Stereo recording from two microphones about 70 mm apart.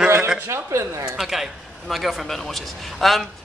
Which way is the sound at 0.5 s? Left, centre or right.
Right.